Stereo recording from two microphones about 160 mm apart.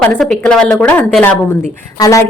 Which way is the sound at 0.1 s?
5° left (ahead or behind).